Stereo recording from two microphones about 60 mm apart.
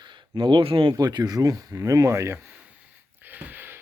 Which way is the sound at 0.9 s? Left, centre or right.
Right.